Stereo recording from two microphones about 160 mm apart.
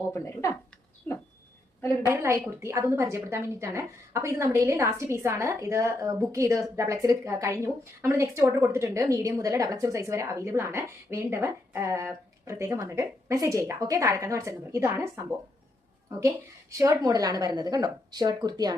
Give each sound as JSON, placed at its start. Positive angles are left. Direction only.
{"t": 0.1, "sound": "speech", "side_deg": 15}
{"t": 2.0, "sound": "a woman's voice", "side_deg": -15}